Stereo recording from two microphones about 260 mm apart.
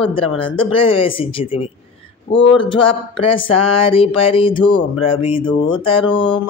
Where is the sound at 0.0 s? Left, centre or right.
Centre.